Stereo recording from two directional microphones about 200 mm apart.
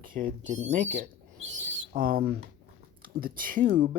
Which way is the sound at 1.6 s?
45° right (ahead or behind).